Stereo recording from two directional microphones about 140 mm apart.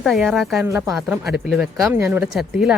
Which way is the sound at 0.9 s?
Centre (ahead or behind).